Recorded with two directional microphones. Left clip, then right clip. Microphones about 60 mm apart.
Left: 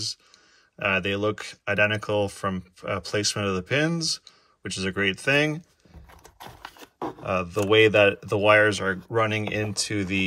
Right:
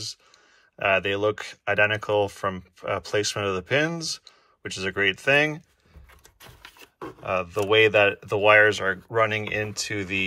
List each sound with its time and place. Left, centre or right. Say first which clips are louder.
0.7 s speech: right 2 dB; left
7.2 s speech: even; left